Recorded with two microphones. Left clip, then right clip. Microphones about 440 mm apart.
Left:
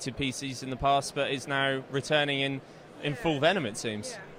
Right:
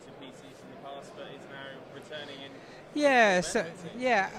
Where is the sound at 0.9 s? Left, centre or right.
Left.